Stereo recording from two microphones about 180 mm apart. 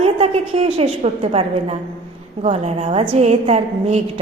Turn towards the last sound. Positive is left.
turn(degrees=-35)  # may be behind; listen again after turning